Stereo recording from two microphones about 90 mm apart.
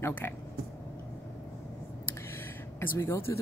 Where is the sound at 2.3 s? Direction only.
30° left (ahead or behind).